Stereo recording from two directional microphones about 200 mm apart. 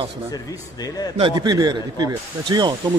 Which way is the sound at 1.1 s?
25° right (ahead or behind).